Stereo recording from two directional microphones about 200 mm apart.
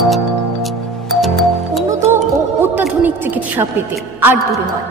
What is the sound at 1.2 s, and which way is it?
Music, centre (ahead or behind).